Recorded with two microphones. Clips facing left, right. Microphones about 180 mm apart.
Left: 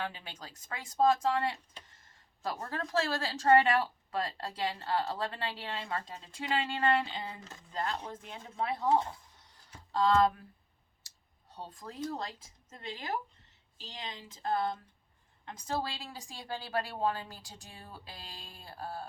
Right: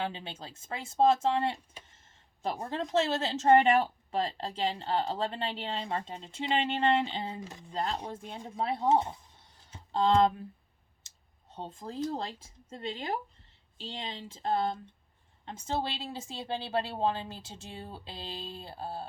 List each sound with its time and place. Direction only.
0.0 s speech: 25° right (ahead or behind)
2.0 s a sound: 25° right (ahead or behind)
2.6 s speech: 20° right (ahead or behind)
7.3 s speech: 15° right (ahead or behind)
7.7 s speech: 25° right (ahead or behind)
11.1 s clicking: 25° right (ahead or behind)
11.5 s speech: 25° right (ahead or behind)